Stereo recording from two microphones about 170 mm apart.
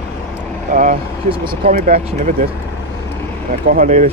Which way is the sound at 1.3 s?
30° right (ahead or behind).